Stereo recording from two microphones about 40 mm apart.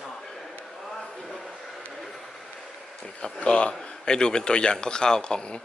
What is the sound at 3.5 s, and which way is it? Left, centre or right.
Speech, left.